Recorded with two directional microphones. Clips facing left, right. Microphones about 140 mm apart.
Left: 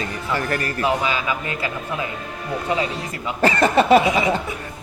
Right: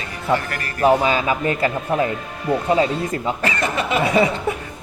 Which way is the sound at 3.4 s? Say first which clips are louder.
Left 6 dB; 35° left (ahead or behind).